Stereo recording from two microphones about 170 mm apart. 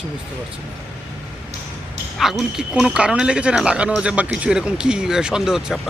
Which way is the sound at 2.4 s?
5° right (ahead or behind).